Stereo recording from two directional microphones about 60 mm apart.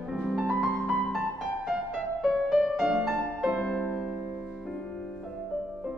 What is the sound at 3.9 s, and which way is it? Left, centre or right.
Music, centre.